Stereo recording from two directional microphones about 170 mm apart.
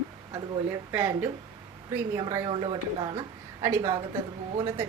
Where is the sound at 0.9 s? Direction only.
15° right (ahead or behind).